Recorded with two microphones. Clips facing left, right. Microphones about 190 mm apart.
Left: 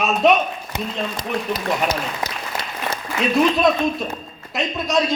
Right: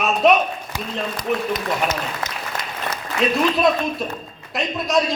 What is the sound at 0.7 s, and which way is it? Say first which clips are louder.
Speech: left 2 dB; 30° left (ahead or behind).